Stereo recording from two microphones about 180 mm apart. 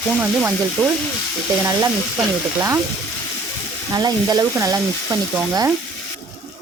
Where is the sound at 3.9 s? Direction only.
20° right (ahead or behind).